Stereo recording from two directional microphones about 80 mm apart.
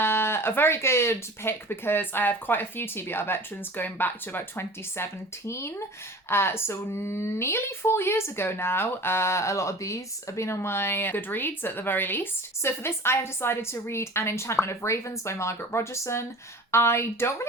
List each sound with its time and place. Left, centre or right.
0.0 s speech: left